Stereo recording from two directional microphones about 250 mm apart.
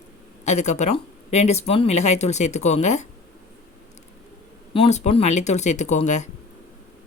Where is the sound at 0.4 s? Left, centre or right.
Left.